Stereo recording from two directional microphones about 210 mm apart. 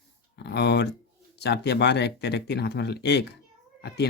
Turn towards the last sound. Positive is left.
turn(degrees=55)  # may be behind; listen again after turning